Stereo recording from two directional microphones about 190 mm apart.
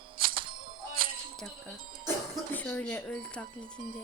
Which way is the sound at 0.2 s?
25° right (ahead or behind).